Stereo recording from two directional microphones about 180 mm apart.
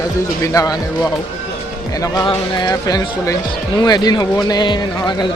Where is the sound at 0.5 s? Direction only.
20° left (ahead or behind).